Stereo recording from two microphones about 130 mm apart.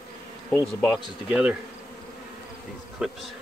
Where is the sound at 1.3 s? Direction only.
10° right (ahead or behind).